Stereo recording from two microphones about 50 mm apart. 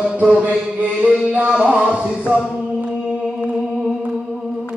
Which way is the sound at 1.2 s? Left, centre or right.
Right.